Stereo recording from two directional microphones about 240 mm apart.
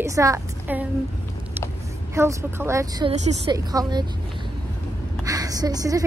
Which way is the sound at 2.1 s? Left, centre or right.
Centre.